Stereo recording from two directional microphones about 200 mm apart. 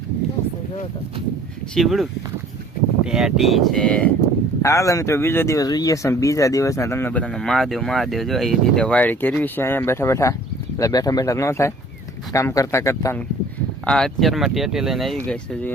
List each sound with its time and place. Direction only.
1.7 s speech: centre (ahead or behind)
4.6 s speech: 15° left (ahead or behind)
13.8 s speech: 5° left (ahead or behind)